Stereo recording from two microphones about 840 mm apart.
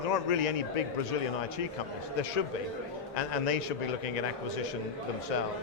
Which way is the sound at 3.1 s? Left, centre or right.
Left.